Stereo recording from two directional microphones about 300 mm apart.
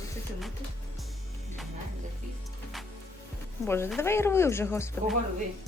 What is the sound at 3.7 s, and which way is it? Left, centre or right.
Speech, centre.